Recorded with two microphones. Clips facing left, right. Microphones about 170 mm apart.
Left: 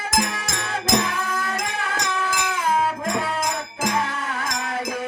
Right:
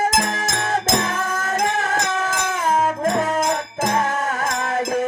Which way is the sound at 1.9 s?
45° right (ahead or behind).